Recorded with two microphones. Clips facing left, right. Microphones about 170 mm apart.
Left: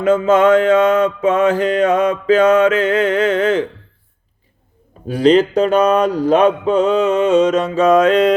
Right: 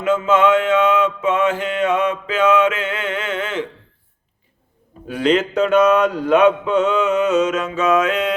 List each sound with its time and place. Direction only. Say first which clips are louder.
0.0 s mantra: left 4 dB; 40° left (ahead or behind)
5.0 s mantra: left 6 dB; 35° left (ahead or behind)